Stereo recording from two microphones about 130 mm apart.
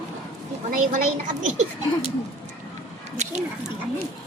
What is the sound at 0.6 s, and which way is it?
Speech, 90° right.